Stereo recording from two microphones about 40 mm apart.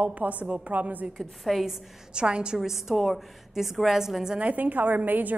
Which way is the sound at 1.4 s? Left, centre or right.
Centre.